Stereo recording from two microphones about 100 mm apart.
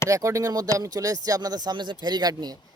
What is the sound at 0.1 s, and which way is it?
Speech, 30° right (ahead or behind).